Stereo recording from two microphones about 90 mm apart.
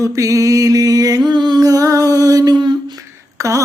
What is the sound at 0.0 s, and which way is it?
Mantra, 35° right (ahead or behind).